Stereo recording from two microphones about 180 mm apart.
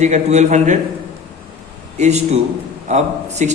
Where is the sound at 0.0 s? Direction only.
40° right (ahead or behind).